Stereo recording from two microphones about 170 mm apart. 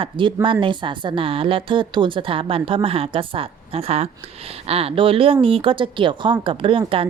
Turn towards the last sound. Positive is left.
turn(degrees=-30)  # may be behind; listen again after turning